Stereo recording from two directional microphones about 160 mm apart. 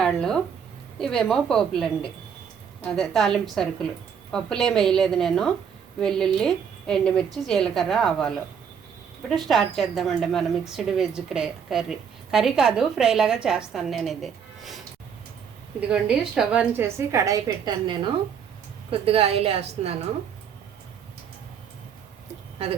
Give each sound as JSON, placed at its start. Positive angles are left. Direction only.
{"t": 0.0, "sound": "a woman's voice", "side_deg": 5}
{"t": 9.3, "sound": "a woman's voice", "side_deg": 0}
{"t": 15.9, "sound": "a woman's voice", "side_deg": -5}